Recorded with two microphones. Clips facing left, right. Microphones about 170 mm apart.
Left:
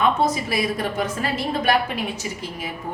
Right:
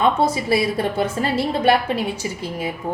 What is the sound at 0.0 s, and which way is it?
A woman's voice, 30° right (ahead or behind).